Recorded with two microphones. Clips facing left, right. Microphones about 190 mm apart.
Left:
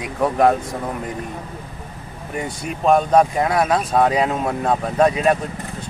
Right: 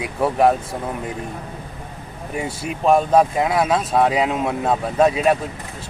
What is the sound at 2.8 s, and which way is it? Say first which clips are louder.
Speech: even; 5° right (ahead or behind).